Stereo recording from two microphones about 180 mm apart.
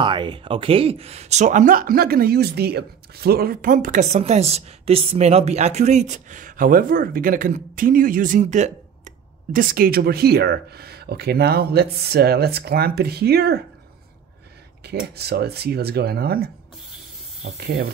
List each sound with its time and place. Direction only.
0.0 s speech: 25° right (ahead or behind); by 13.6 s 60° right (ahead or behind)
15.1 s speech: 65° right (ahead or behind)
17.5 s speech: 65° right (ahead or behind)